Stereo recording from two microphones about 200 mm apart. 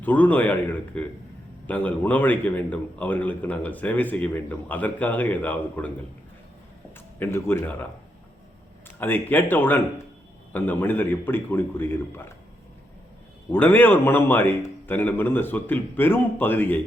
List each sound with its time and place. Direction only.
0.0 s a man's voice: 10° left (ahead or behind)
6.9 s speech: 10° left (ahead or behind)
9.0 s a man's voice: 10° left (ahead or behind)
13.5 s a man's voice: 10° left (ahead or behind)